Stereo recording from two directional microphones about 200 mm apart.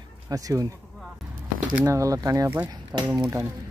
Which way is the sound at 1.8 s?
15° right (ahead or behind).